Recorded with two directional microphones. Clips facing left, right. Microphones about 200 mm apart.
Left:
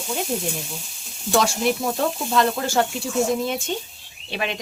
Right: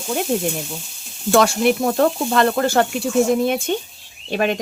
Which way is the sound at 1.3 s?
60° right (ahead or behind).